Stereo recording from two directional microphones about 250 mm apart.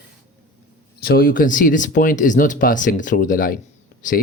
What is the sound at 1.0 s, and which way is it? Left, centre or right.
Speech, left.